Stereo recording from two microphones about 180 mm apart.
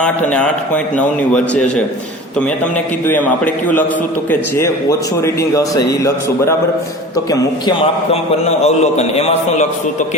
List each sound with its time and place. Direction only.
0.0 s speech: 5° left (ahead or behind)
3.1 s speech: 10° left (ahead or behind)
7.3 s a man's voice: 25° left (ahead or behind)